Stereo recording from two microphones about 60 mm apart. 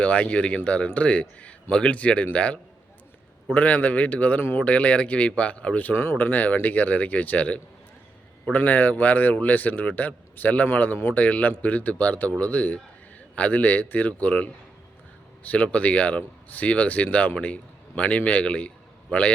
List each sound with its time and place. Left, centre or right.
0.0 s speech: left
5.9 s speech: left
6.1 s speech: left